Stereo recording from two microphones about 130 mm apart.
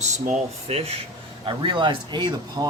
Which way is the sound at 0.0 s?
60° right (ahead or behind).